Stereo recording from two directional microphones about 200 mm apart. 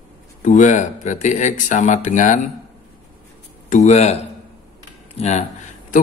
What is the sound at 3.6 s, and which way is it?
Speech, 35° left (ahead or behind).